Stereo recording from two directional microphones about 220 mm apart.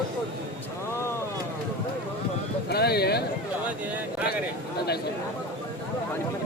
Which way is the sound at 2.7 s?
45° left (ahead or behind).